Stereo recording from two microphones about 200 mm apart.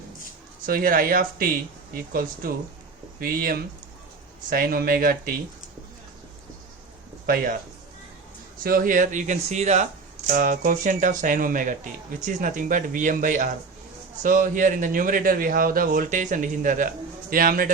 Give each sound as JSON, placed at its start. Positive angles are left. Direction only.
{"t": 0.6, "sound": "a man's voice", "side_deg": -45}
{"t": 7.3, "sound": "a man's voice", "side_deg": -45}
{"t": 8.6, "sound": "a man's voice", "side_deg": -45}